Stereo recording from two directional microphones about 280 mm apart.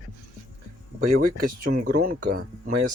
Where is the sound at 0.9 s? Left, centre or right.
Right.